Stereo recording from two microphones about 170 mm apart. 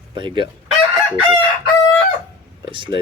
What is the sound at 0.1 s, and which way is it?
Chicken, 30° right (ahead or behind).